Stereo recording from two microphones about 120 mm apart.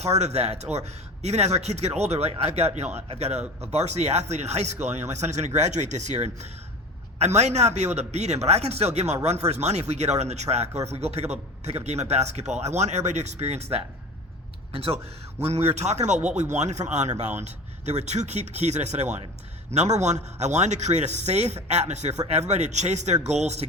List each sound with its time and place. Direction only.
0.0 s a man's voice: 65° right (ahead or behind)